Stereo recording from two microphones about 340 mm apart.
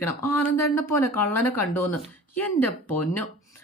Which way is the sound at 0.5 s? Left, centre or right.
Left.